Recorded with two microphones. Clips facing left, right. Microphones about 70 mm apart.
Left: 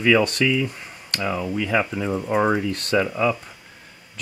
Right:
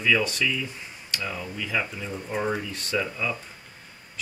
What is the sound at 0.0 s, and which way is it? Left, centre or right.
Speech, left.